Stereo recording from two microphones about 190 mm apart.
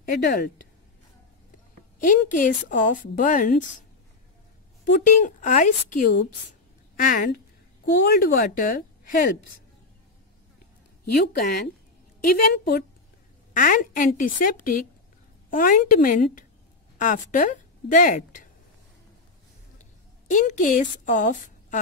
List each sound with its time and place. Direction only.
0.0 s speech: 55° left (ahead or behind)
2.0 s a woman's voice: 45° left (ahead or behind)
5.0 s a woman's voice: 40° left (ahead or behind)
11.1 s a woman's voice: 60° left (ahead or behind)
13.5 s a woman's voice: 45° left (ahead or behind)
19.8 s a sound: 40° left (ahead or behind)